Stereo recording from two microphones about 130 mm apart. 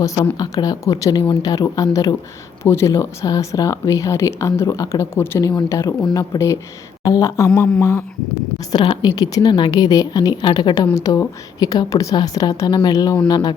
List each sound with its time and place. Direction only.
0.0 s speech: 30° left (ahead or behind)
8.7 s a woman's voice: 35° left (ahead or behind)